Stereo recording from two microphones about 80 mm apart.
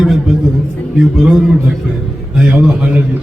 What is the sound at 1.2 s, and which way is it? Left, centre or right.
A man's voice, centre.